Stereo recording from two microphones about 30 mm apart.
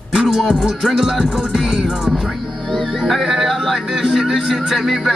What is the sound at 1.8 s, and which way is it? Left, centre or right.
Speech, centre.